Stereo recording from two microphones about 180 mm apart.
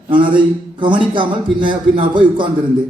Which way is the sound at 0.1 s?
25° right (ahead or behind).